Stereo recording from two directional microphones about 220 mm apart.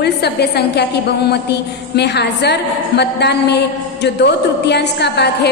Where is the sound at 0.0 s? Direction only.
50° left (ahead or behind).